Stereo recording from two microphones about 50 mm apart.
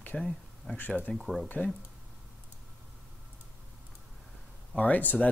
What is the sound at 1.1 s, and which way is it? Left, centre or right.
Speech, centre.